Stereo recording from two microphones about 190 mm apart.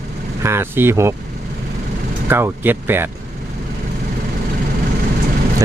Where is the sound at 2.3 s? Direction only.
10° right (ahead or behind).